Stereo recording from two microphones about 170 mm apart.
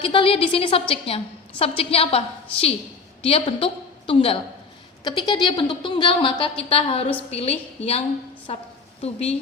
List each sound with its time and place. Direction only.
0.0 s a woman's voice: 30° left (ahead or behind)